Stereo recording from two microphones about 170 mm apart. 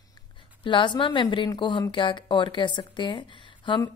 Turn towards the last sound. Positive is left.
turn(degrees=30)  # may be behind; listen again after turning